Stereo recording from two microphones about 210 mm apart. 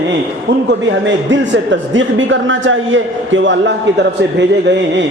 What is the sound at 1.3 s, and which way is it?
A man's voice, 60° right (ahead or behind).